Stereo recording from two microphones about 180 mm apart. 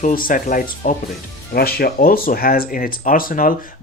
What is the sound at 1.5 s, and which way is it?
Speech, 60° left (ahead or behind).